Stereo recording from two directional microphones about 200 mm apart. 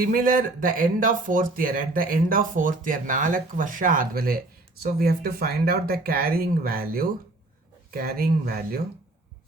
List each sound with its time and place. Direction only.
0.0 s speech: 45° right (ahead or behind)